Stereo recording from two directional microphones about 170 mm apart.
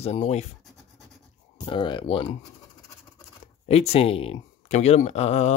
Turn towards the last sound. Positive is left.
turn(degrees=40)  # may be behind; listen again after turning